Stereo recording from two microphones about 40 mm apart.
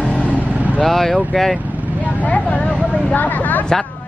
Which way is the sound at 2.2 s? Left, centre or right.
Left.